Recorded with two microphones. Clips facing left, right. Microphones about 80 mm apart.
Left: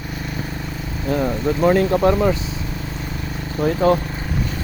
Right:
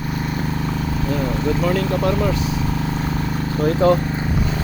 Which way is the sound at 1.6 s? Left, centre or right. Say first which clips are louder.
Left 7 dB; left.